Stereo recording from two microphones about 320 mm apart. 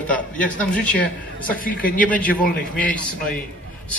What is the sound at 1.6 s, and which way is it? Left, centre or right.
Speech, left.